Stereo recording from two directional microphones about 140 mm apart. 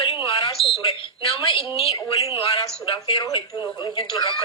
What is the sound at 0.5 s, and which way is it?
Smoke detector, centre (ahead or behind).